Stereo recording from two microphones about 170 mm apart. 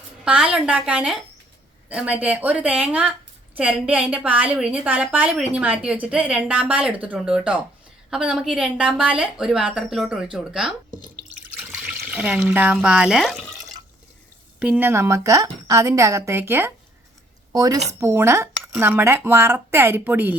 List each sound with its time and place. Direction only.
0.3 s a woman's voice: 5° right (ahead or behind)
14.6 s a woman's voice: 10° right (ahead or behind)